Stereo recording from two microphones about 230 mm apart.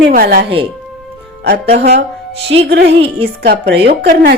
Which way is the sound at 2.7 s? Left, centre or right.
Right.